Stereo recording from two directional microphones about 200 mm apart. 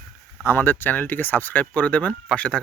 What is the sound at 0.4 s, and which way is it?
Speech, 10° left (ahead or behind).